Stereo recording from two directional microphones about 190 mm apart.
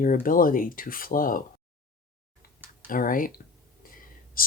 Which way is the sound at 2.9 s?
45° left (ahead or behind).